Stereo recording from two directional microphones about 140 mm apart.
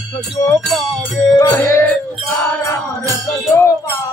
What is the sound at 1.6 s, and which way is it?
Music, 15° left (ahead or behind).